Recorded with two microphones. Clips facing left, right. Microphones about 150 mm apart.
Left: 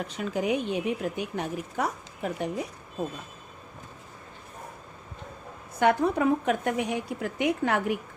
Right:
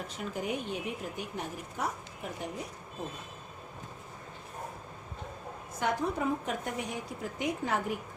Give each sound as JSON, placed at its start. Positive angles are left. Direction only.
{"t": 0.2, "sound": "a woman's voice", "side_deg": 90}
{"t": 5.8, "sound": "a woman's voice", "side_deg": 70}